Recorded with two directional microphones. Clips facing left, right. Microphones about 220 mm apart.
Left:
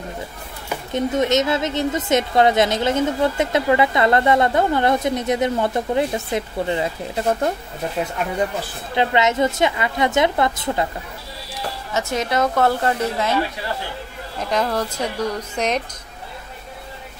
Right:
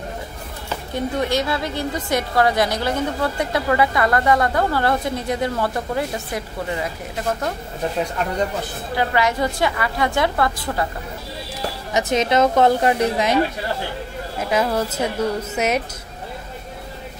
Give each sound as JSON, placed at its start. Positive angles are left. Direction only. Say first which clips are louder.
{"t": 0.7, "sound": "a woman's voice", "louder": "left 3 dB", "side_deg": 20}
{"t": 8.0, "sound": "speech", "louder": "left 1 dB", "side_deg": 5}
{"t": 8.9, "sound": "a woman's voice", "louder": "left 2 dB", "side_deg": 20}
{"t": 11.9, "sound": "a woman's voice", "louder": "right 4 dB", "side_deg": -20}
{"t": 14.4, "sound": "a woman's voice", "louder": "right 1 dB", "side_deg": -5}